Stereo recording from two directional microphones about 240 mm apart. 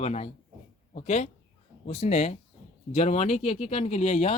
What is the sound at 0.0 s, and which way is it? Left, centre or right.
Speech, left.